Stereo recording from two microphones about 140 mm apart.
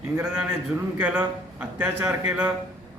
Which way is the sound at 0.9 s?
10° right (ahead or behind).